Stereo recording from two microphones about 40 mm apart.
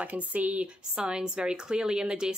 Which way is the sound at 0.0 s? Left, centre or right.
Right.